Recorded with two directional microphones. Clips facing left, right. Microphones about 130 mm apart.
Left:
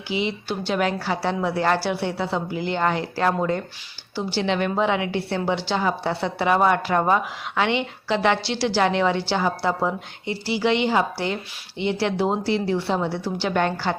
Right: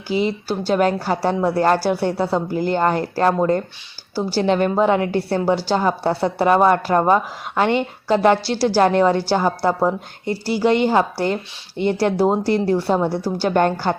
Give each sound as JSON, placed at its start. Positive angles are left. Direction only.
{"t": 0.1, "sound": "a woman's voice", "side_deg": -40}